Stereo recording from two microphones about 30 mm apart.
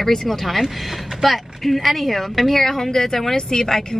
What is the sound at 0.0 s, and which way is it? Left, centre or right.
A woman's voice, centre.